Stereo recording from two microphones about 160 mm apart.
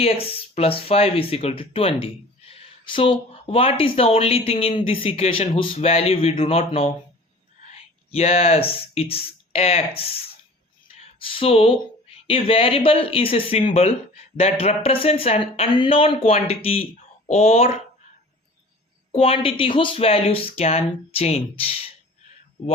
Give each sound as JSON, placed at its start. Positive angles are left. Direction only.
{"t": 0.0, "sound": "speech", "side_deg": 35}
{"t": 10.9, "sound": "a sound", "side_deg": 35}
{"t": 12.3, "sound": "speech", "side_deg": 35}
{"t": 19.1, "sound": "speech", "side_deg": 35}